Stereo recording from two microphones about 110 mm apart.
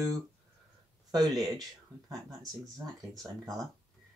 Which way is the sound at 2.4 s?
35° right (ahead or behind).